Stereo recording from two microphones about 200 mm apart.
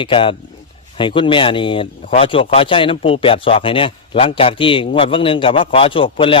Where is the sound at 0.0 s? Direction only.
25° left (ahead or behind).